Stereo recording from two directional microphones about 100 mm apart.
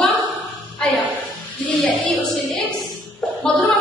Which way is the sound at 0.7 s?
10° left (ahead or behind).